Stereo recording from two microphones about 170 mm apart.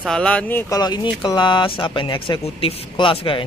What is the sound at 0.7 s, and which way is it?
Speech, 25° left (ahead or behind).